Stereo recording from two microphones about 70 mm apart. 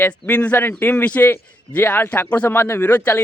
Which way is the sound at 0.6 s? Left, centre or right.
Left.